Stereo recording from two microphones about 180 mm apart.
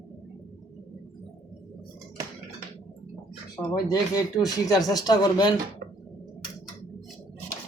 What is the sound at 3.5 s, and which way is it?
Speech, 20° left (ahead or behind).